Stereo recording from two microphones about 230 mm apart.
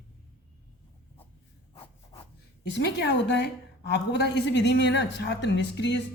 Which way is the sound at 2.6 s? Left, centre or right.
Left.